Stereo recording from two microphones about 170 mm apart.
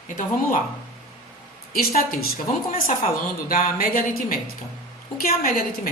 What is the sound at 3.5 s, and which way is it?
Speech, 55° left (ahead or behind).